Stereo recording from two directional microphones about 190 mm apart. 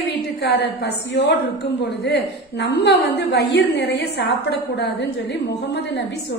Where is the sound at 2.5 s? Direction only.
65° left (ahead or behind).